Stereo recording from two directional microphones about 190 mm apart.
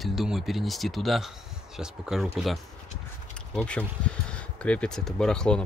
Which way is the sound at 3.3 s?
5° left (ahead or behind).